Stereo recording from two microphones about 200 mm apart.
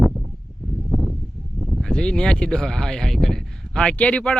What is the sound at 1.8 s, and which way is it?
Speech, 5° left (ahead or behind).